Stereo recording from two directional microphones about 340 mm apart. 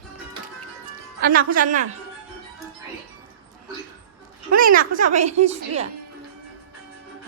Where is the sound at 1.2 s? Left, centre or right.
Right.